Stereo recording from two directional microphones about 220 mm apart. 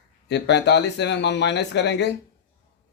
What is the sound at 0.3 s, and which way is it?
Speech, 50° left (ahead or behind).